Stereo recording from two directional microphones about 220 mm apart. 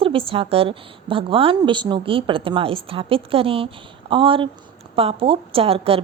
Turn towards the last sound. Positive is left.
turn(degrees=-25)  # may be behind; listen again after turning